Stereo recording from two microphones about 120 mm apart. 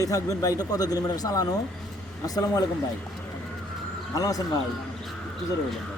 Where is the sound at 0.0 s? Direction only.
30° left (ahead or behind).